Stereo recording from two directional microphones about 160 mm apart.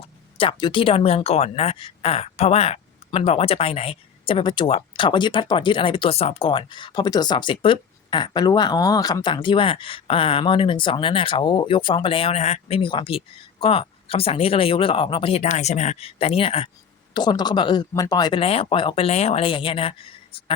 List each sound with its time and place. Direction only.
0.3 s speech: 30° left (ahead or behind)
17.2 s speech: 25° left (ahead or behind)